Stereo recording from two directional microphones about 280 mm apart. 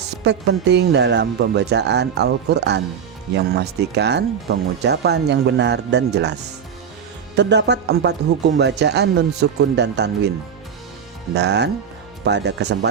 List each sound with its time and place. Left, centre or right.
0.3 s speech: right
7.3 s speech: right
11.3 s speech: right